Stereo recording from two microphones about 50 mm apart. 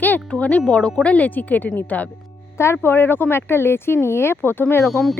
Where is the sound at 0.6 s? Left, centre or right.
Centre.